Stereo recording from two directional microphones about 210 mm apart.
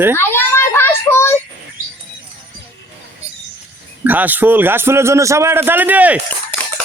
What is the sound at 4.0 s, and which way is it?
A man's voice, 10° right (ahead or behind).